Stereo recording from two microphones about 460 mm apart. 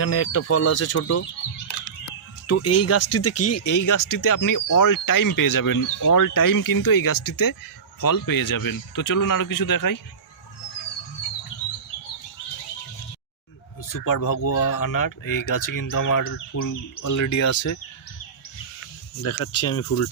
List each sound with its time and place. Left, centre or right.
0.0 s speech: left
2.5 s speech: left
13.9 s speech: left
18.8 s speech: left